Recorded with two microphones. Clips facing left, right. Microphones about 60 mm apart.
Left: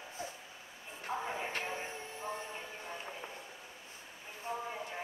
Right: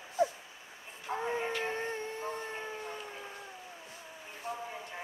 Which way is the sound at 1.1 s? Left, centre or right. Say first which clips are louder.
Right 2 dB; right.